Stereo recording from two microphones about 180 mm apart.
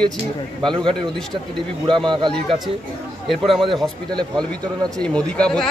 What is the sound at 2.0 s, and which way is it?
Speech, 25° right (ahead or behind).